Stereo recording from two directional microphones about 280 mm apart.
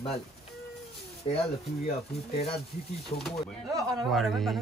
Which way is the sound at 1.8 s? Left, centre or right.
Left.